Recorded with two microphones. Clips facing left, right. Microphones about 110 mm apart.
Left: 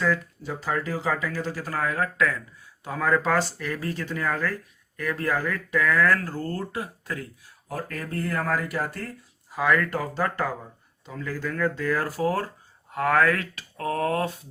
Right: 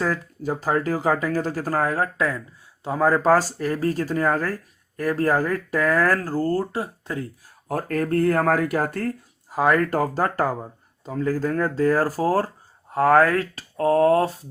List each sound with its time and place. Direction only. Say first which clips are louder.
0.0 s speech: right 1 dB; 40° right (ahead or behind)
7.7 s speech: right 9 dB; 50° right (ahead or behind); by 14.3 s 30° right (ahead or behind)